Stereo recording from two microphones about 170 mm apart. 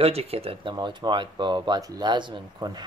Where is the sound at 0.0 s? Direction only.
35° right (ahead or behind).